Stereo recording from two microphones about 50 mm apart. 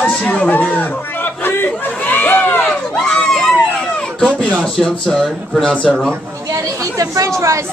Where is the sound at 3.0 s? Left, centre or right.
Centre.